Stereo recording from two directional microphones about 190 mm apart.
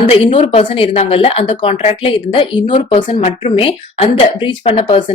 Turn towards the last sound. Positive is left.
turn(degrees=30)  # may be behind; listen again after turning